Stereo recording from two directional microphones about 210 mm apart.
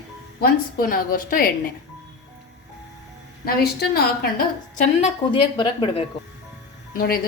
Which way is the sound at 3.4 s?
50° left (ahead or behind).